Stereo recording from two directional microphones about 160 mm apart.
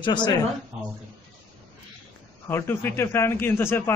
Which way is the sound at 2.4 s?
15° left (ahead or behind).